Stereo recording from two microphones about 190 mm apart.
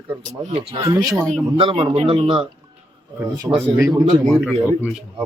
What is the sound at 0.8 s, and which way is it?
Speech, 20° right (ahead or behind).